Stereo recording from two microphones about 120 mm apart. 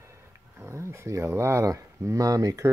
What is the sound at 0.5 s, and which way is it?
Speech, 20° right (ahead or behind).